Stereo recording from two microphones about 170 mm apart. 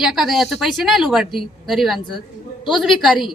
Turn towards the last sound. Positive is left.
turn(degrees=0)  # may be behind; listen again after turning